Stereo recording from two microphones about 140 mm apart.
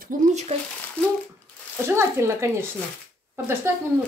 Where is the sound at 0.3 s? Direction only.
55° right (ahead or behind).